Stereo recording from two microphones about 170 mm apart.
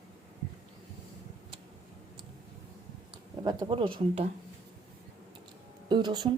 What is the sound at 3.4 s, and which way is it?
Speech, 25° right (ahead or behind).